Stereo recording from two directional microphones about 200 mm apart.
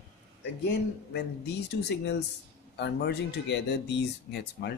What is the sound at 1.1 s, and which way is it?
Speech, 60° left (ahead or behind).